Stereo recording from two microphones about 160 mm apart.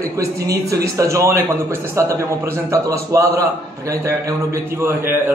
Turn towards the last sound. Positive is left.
turn(degrees=-15)  # may be behind; listen again after turning